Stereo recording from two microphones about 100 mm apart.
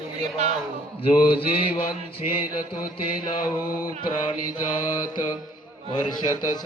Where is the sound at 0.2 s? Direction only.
90° right.